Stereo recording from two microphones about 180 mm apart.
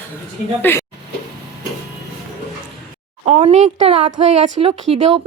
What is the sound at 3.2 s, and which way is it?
Speech, 35° right (ahead or behind).